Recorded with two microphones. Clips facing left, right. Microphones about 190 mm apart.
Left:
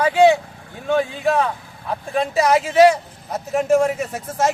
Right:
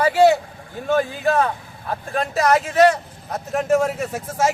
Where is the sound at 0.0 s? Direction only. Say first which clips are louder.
Left 1 dB; 5° right (ahead or behind).